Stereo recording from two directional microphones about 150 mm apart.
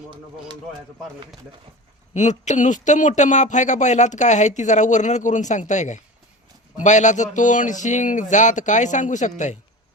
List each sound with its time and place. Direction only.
2.1 s speech: 50° left (ahead or behind)